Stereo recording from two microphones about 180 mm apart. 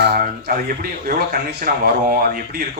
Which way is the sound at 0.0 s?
60° right (ahead or behind).